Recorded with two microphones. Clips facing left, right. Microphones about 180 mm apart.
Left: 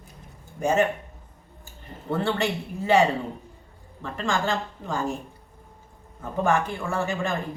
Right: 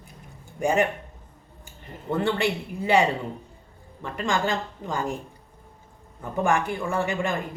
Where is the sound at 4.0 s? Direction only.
15° right (ahead or behind).